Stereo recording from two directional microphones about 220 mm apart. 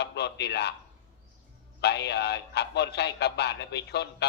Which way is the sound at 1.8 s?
50° left (ahead or behind).